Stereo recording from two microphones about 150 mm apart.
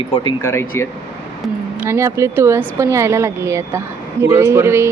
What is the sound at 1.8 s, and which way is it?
Speech, 15° right (ahead or behind).